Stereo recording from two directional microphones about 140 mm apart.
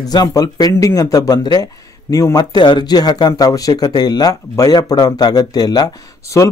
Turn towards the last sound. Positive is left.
turn(degrees=25)  # may be behind; listen again after turning